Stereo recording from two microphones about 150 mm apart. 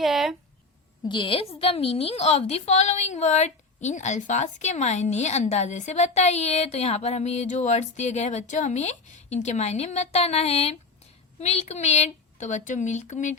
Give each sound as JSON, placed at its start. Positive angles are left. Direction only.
{"t": 0.0, "sound": "speech", "side_deg": 0}
{"t": 1.0, "sound": "a woman's voice", "side_deg": 35}